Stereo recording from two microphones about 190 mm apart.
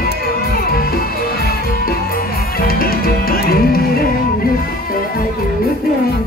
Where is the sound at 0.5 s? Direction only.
50° left (ahead or behind).